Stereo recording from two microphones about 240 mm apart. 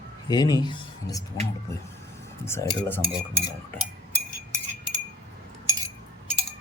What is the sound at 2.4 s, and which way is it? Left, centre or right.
Speech, centre.